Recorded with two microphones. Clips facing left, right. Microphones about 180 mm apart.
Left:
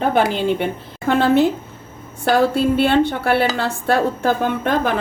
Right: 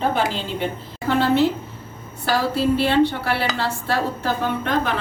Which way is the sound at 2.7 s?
55° left (ahead or behind).